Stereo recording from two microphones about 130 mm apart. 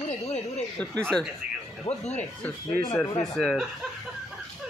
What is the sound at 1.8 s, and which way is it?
Speech, 60° left (ahead or behind).